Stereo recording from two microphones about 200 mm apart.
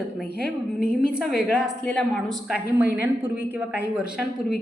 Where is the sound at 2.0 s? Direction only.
Centre (ahead or behind).